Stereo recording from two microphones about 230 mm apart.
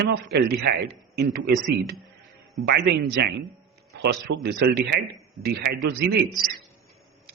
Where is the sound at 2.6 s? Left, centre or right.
Right.